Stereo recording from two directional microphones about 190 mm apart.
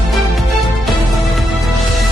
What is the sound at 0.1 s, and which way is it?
Music, centre (ahead or behind).